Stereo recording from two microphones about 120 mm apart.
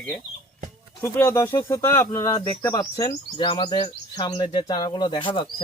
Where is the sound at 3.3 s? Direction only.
40° left (ahead or behind).